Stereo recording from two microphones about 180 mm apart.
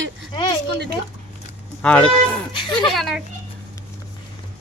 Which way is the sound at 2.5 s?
25° left (ahead or behind).